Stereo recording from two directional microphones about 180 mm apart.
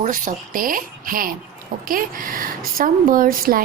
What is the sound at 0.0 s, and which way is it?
Speech, 45° right (ahead or behind).